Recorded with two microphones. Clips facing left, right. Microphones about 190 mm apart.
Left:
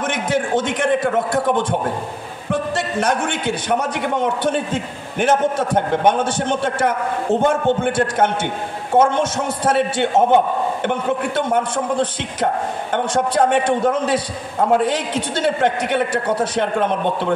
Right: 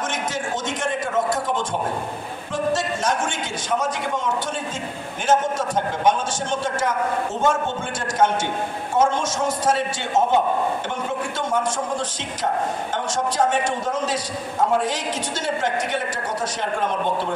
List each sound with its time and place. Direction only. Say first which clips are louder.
0.1 s a man's voice: left 7 dB; 60° left (ahead or behind)